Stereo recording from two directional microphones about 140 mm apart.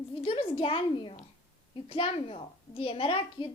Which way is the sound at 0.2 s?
40° left (ahead or behind).